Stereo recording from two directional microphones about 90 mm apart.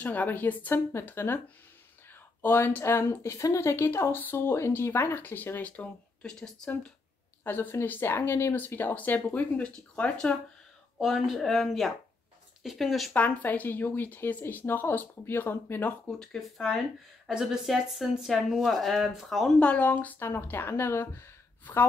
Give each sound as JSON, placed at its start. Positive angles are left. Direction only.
{"t": 0.0, "sound": "speech", "side_deg": 20}
{"t": 7.4, "sound": "speech", "side_deg": 25}
{"t": 11.0, "sound": "speech", "side_deg": -5}
{"t": 13.1, "sound": "speech", "side_deg": 20}
{"t": 16.1, "sound": "speech", "side_deg": 5}
{"t": 19.6, "sound": "speech", "side_deg": 15}